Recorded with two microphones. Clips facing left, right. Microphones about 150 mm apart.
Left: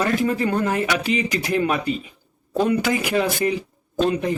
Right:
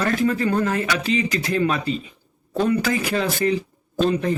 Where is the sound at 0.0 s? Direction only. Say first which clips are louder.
Even; 20° left (ahead or behind).